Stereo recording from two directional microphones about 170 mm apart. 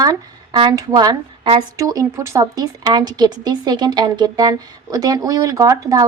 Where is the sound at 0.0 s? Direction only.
25° right (ahead or behind).